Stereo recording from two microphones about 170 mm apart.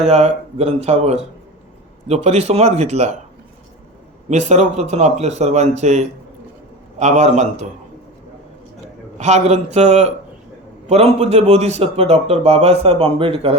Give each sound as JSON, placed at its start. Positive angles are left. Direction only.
{"t": 0.0, "sound": "a man's voice", "side_deg": -40}
{"t": 4.3, "sound": "a man's voice", "side_deg": -40}
{"t": 9.1, "sound": "a man's voice", "side_deg": -40}